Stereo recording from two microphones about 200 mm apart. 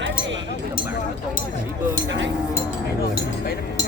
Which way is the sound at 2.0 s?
65° right (ahead or behind).